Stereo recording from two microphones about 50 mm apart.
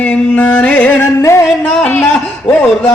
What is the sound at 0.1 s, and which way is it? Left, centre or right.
Music, left.